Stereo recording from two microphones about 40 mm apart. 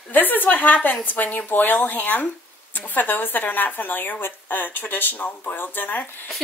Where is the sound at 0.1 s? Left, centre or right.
Left.